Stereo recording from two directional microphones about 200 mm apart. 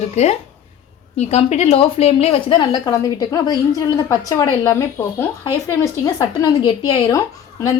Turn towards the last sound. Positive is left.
turn(degrees=15)  # may be behind; listen again after turning